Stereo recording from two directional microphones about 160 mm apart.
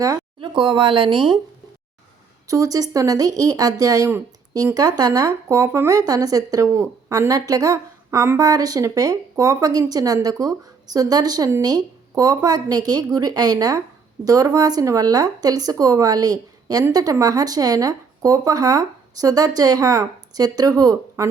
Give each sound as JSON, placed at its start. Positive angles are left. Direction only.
{"t": 0.3, "sound": "speech", "side_deg": -30}
{"t": 2.5, "sound": "speech", "side_deg": -20}